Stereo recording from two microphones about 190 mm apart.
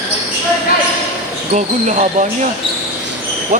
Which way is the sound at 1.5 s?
40° right (ahead or behind).